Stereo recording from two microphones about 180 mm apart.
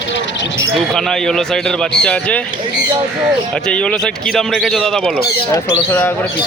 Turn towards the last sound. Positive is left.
turn(degrees=15)  # may be behind; listen again after turning